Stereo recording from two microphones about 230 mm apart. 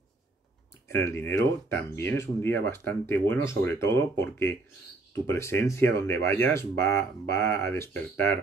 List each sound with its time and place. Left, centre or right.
0.8 s speech: centre